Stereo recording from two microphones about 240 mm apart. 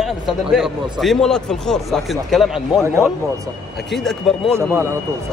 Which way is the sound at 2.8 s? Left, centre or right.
Centre.